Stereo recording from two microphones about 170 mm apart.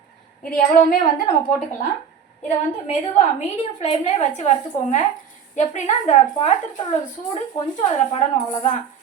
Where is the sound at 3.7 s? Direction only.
40° left (ahead or behind).